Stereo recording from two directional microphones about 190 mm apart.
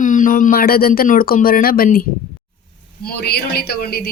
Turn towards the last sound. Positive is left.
turn(degrees=55)  # may be behind; listen again after turning